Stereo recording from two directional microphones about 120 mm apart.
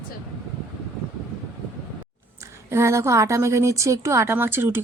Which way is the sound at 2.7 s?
25° right (ahead or behind).